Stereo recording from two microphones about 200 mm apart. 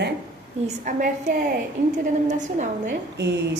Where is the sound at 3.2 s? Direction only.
55° right (ahead or behind).